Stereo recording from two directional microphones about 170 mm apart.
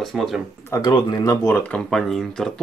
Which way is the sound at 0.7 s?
25° left (ahead or behind).